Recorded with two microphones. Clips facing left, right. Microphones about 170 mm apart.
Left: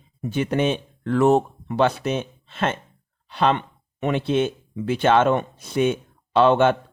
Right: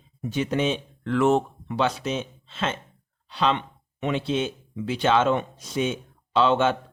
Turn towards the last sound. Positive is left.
turn(degrees=55)  # may be behind; listen again after turning